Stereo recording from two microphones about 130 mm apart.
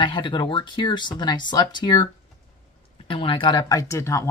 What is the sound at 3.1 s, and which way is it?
Speech, 40° left (ahead or behind).